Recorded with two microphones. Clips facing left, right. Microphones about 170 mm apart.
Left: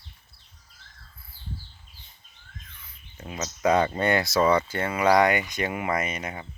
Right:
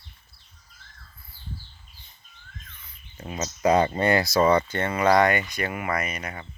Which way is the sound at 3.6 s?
10° right (ahead or behind).